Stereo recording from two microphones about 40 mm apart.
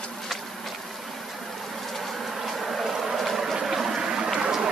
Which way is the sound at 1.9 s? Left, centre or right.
Centre.